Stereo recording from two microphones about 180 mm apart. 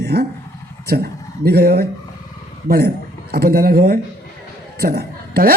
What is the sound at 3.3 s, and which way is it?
A woman's voice, 60° right (ahead or behind).